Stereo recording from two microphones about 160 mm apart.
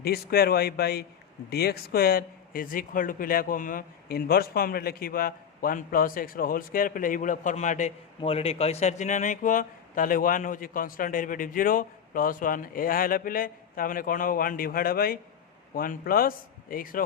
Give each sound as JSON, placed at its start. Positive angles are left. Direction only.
{"t": 0.0, "sound": "a man's voice", "side_deg": 75}